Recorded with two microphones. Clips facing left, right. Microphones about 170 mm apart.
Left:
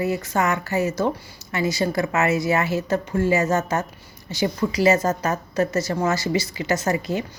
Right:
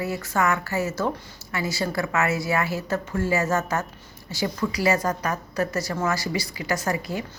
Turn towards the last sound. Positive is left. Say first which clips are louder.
# left 4 dB
turn(degrees=20)  # may be behind; listen again after turning